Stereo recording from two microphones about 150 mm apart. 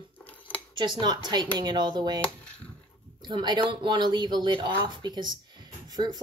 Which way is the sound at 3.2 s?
30° right (ahead or behind).